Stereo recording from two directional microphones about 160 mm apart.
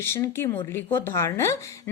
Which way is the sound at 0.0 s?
15° left (ahead or behind).